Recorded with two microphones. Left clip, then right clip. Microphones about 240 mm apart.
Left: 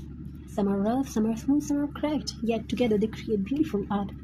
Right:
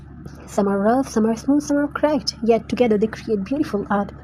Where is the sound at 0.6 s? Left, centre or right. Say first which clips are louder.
Right 9 dB; right.